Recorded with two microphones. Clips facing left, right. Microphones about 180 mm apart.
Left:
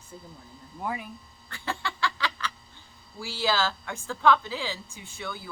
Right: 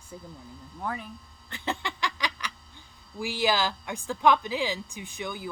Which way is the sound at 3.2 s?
15° right (ahead or behind).